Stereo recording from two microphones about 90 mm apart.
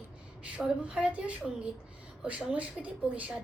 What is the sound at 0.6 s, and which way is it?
A woman's voice, 10° right (ahead or behind).